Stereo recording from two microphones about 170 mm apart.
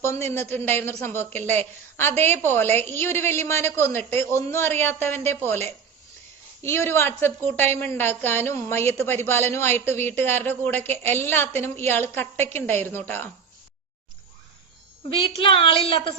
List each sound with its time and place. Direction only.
0.0 s a woman's voice: 15° left (ahead or behind)
15.4 s speech: 30° left (ahead or behind)